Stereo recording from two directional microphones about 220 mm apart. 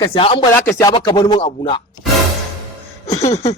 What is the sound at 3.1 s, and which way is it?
Speech, 30° left (ahead or behind).